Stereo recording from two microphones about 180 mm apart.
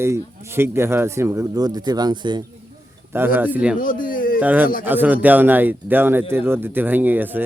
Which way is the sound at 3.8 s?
50° left (ahead or behind).